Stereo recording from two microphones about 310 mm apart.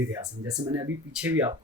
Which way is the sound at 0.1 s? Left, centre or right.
Centre.